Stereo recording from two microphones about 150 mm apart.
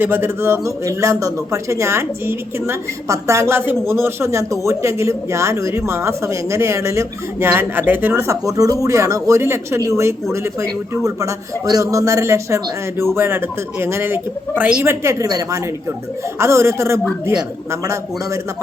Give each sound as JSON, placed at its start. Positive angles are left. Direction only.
{"t": 0.0, "sound": "a man's voice", "side_deg": -15}